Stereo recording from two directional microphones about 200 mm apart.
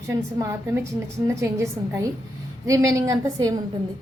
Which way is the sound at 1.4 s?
15° right (ahead or behind).